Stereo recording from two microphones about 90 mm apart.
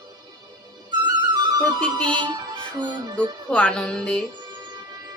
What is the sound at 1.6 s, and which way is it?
Speech, 10° left (ahead or behind).